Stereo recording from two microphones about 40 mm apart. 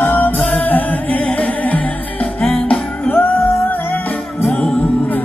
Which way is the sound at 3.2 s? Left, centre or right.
Left.